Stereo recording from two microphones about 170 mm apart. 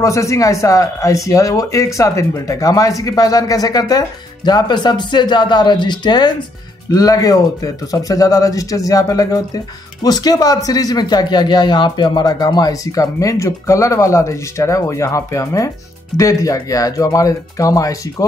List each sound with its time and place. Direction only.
0.0 s speech: 20° left (ahead or behind)